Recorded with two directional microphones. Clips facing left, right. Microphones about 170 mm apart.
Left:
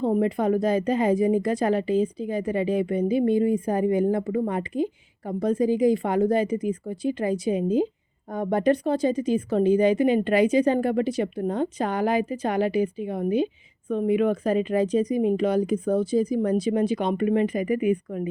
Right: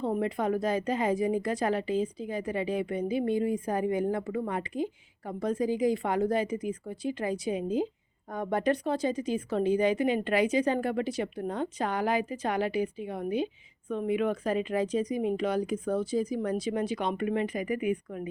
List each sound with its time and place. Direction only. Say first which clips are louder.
0.0 s a woman's voice: left 6 dB; 35° left (ahead or behind)